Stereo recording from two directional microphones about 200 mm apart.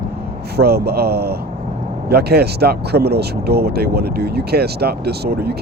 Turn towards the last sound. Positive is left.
turn(degrees=-55)  # may be behind; listen again after turning